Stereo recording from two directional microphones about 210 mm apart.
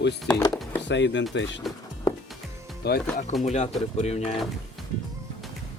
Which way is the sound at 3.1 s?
35° left (ahead or behind).